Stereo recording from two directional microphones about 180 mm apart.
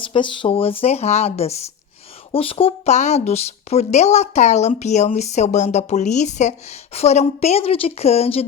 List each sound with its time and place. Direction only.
0.0 s speech: 30° left (ahead or behind)